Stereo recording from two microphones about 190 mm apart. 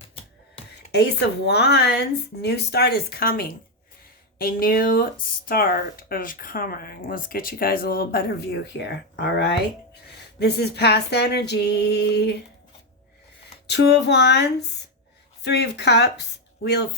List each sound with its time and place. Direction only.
0.9 s a woman's voice: 60° left (ahead or behind)
13.7 s a woman's voice: 65° left (ahead or behind)